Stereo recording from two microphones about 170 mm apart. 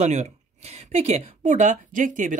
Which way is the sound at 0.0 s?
40° right (ahead or behind).